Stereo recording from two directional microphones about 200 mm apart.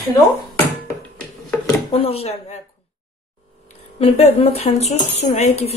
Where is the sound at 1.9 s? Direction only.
30° left (ahead or behind).